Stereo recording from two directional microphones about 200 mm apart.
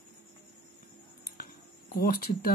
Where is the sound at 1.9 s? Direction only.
45° left (ahead or behind).